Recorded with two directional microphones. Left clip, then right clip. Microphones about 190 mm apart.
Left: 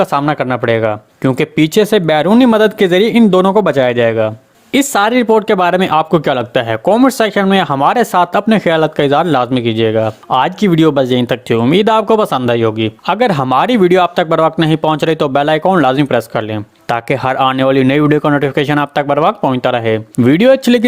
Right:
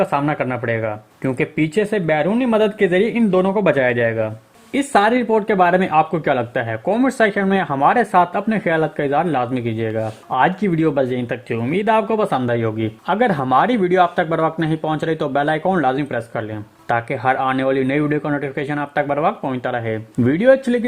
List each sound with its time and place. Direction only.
0.0 s speech: 30° left (ahead or behind)